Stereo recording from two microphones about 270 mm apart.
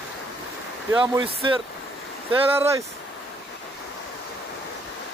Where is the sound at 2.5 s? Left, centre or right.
Centre.